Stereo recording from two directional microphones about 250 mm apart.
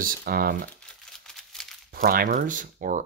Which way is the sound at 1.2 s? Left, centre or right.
Centre.